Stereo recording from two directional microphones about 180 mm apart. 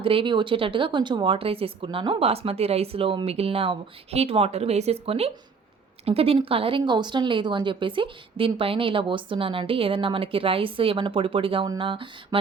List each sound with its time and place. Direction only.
0.0 s speech: 30° right (ahead or behind)